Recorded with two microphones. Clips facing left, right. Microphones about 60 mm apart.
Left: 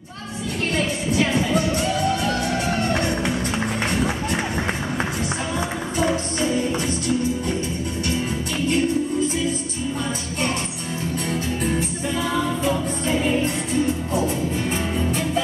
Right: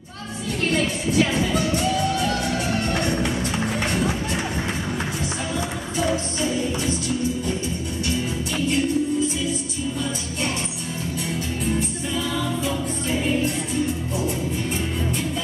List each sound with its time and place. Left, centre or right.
2.1 s music: left
3.0 s music: centre
12.2 s music: left
14.7 s music: left